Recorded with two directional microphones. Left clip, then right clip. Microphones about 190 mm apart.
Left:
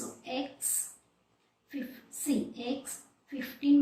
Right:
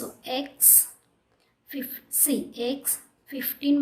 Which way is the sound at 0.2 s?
55° right (ahead or behind).